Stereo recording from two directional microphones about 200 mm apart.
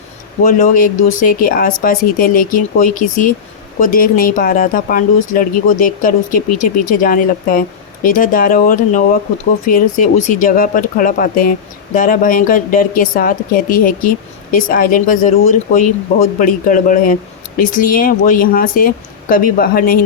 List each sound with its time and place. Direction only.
0.4 s speech: 40° left (ahead or behind)